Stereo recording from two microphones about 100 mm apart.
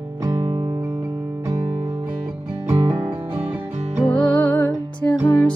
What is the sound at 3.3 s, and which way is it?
Music, 20° right (ahead or behind).